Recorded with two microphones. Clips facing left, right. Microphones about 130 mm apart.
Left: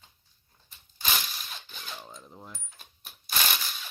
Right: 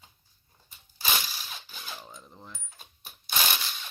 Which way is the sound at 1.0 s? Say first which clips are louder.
Right 1 dB; centre (ahead or behind).